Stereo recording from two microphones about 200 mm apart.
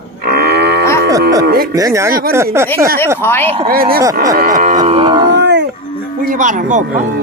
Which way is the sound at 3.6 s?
45° right (ahead or behind).